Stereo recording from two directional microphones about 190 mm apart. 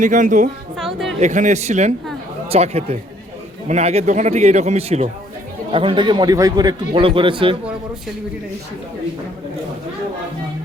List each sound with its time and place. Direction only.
0.0 s a woman's voice: 40° right (ahead or behind)
0.8 s a woman's voice: centre (ahead or behind)
1.2 s a man's voice: 40° right (ahead or behind)